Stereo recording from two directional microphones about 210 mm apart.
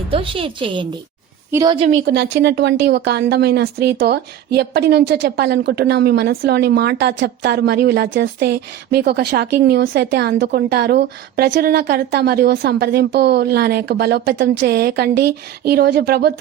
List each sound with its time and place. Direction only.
0.1 s a woman's voice: 25° right (ahead or behind)
1.5 s a woman's voice: 15° right (ahead or behind)
2.0 s speech: 55° right (ahead or behind)